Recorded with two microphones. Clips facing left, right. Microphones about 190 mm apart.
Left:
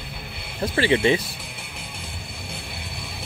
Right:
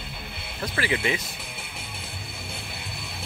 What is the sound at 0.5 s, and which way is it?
Speech, 30° left (ahead or behind).